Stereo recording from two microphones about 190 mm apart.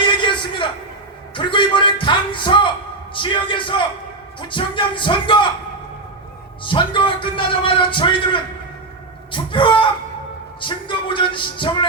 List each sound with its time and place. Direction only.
0.2 s a sound: 25° left (ahead or behind)
1.4 s a man's voice: 25° left (ahead or behind)
6.7 s a man's voice: 25° left (ahead or behind)